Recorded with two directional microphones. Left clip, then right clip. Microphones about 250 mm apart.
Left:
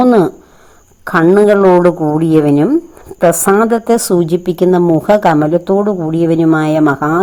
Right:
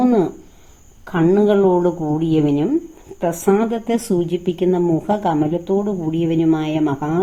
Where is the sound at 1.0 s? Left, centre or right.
Left.